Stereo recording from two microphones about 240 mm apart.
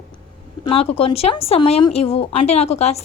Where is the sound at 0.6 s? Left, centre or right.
Left.